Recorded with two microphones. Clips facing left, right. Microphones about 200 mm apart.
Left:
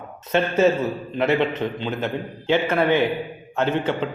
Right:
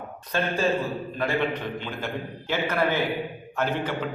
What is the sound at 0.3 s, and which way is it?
A man's voice, 25° left (ahead or behind).